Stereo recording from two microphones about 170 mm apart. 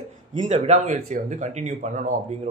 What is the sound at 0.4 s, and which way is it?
Speech, 45° right (ahead or behind).